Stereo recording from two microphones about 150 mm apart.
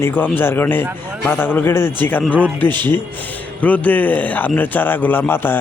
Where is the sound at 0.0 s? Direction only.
15° left (ahead or behind).